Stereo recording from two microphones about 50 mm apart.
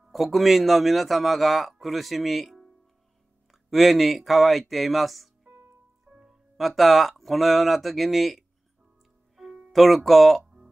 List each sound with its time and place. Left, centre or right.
0.1 s a man's voice: centre
9.7 s a man's voice: centre